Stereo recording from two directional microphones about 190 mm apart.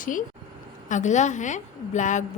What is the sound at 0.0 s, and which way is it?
A woman's voice, 45° left (ahead or behind).